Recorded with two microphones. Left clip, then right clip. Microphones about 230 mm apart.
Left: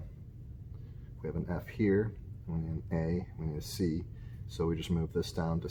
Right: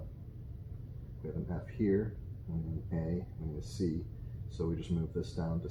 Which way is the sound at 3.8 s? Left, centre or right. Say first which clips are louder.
Left 1 dB; left.